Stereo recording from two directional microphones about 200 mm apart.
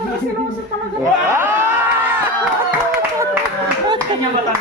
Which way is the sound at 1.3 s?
10° right (ahead or behind).